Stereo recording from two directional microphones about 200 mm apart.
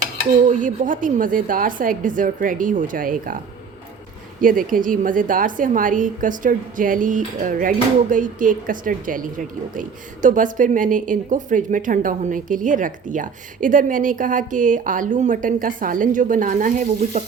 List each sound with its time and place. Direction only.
0.4 s a woman's voice: 40° right (ahead or behind)
4.4 s a woman's voice: 45° right (ahead or behind)